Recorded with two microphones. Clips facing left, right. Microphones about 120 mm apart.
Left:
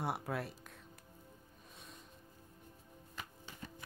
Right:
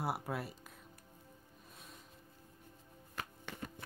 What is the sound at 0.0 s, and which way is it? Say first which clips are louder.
Speech: even; centre (ahead or behind).